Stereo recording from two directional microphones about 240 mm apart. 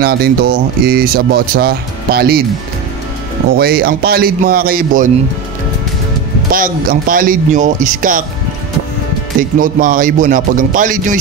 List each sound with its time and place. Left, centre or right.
0.0 s speech: right
3.5 s speech: right
6.5 s speech: right
9.4 s speech: right